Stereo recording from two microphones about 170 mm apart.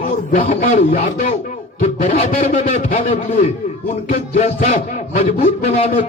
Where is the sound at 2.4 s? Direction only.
40° left (ahead or behind).